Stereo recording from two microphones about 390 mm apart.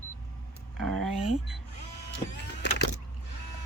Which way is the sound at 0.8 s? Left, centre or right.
Right.